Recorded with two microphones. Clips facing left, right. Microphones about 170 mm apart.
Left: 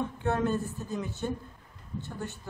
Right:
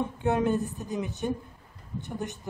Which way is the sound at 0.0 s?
15° right (ahead or behind).